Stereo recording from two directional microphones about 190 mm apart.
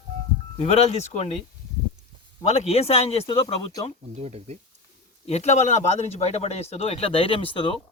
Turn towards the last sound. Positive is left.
turn(degrees=30)  # may be behind; listen again after turning